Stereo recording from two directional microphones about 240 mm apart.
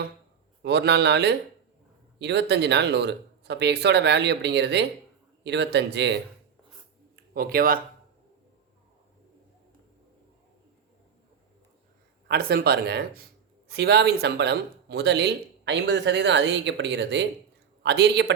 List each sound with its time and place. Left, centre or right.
0.6 s speech: right
7.3 s speech: right
12.3 s speech: right